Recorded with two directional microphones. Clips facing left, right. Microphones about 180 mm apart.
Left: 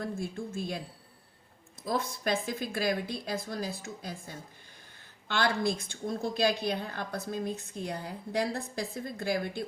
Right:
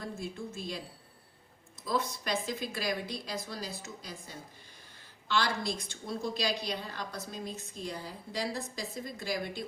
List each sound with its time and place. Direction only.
0.0 s speech: 55° left (ahead or behind)
1.8 s a woman's voice: 50° left (ahead or behind)